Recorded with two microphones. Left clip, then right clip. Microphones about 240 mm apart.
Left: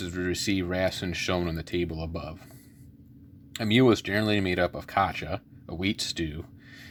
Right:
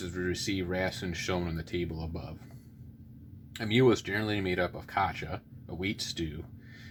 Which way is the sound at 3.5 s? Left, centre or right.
Left.